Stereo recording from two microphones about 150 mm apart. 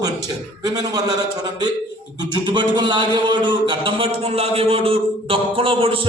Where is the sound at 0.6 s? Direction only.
25° right (ahead or behind).